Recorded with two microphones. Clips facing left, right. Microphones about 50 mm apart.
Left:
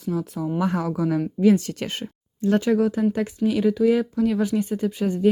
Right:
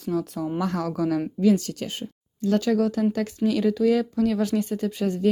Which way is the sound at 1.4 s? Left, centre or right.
Left.